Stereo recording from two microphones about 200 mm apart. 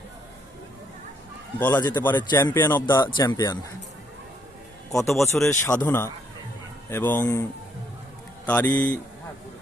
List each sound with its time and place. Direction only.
1.5 s speech: 15° left (ahead or behind)
4.9 s a man's voice: 15° left (ahead or behind)
8.4 s speech: 10° left (ahead or behind)